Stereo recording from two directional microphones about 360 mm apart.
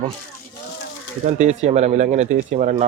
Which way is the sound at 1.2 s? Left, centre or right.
Centre.